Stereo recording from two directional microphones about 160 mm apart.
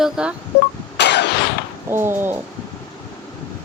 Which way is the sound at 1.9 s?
15° right (ahead or behind).